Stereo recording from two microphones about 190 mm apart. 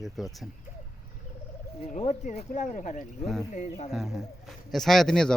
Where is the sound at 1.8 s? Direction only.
35° left (ahead or behind).